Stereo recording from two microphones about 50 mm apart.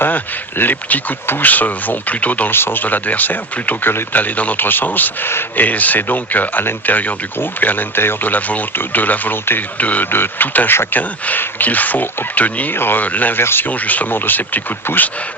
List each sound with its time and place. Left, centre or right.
0.6 s speech: left
2.5 s speech: left
2.8 s speech: left
9.7 s speech: left
10.1 s speech: left
12.7 s speech: left
13.0 s speech: left
13.4 s speech: left
13.7 s speech: left